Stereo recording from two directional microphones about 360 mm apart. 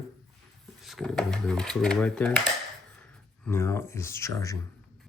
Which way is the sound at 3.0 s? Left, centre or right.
Centre.